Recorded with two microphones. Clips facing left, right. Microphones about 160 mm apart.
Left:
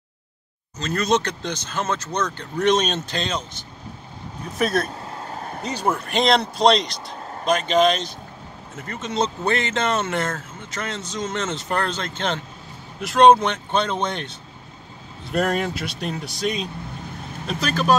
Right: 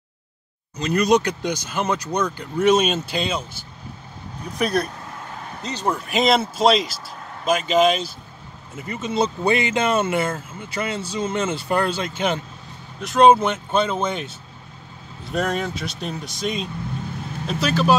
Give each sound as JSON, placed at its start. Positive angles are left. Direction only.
{"t": 0.7, "sound": "speech", "side_deg": -10}
{"t": 5.1, "sound": "vehicle", "side_deg": 40}
{"t": 5.7, "sound": "a man's voice", "side_deg": 10}
{"t": 5.9, "sound": "speech", "side_deg": 0}
{"t": 15.3, "sound": "speech", "side_deg": 0}